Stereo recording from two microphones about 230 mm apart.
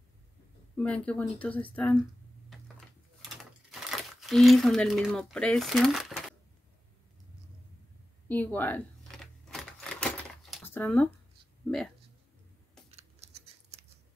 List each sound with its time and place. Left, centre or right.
0.7 s speech: centre
3.7 s speech: centre
8.3 s keys jangling: centre
12.9 s scissors: right